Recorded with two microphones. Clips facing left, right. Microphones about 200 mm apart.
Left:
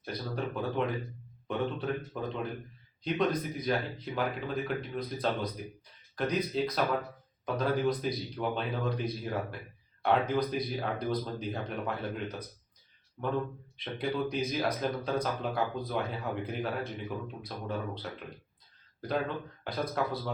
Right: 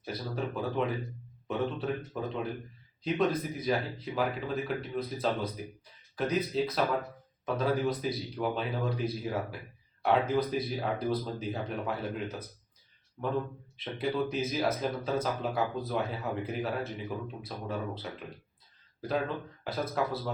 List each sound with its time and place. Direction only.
0.0 s speech: 5° right (ahead or behind)
19.6 s speech: 5° right (ahead or behind)